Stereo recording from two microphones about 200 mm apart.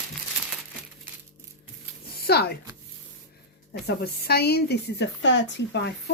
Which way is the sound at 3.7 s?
55° left (ahead or behind).